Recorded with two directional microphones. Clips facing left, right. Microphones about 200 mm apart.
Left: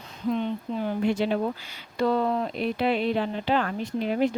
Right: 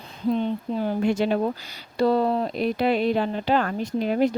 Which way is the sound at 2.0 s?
35° right (ahead or behind).